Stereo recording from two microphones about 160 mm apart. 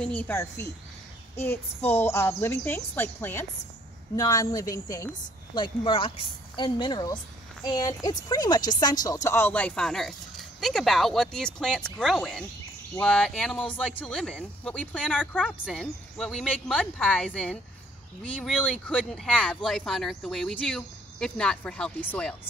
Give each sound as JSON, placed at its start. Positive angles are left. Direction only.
{"t": 0.0, "sound": "a woman's voice", "side_deg": 10}
{"t": 1.3, "sound": "child singing", "side_deg": 15}
{"t": 1.9, "sound": "a woman's voice", "side_deg": 15}
{"t": 18.7, "sound": "speech", "side_deg": 5}